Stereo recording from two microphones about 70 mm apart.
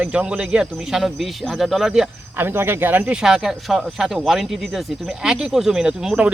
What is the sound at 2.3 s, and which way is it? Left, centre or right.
Speech, right.